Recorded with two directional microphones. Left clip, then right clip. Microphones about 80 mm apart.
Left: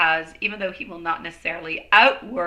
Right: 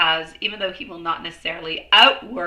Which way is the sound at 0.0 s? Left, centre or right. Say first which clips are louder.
Right 1 dB; left.